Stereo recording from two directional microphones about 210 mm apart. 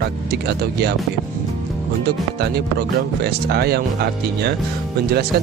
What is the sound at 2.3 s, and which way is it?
Speech, 50° right (ahead or behind).